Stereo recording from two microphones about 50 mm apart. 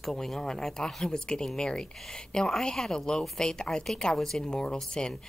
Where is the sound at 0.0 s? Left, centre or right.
Centre.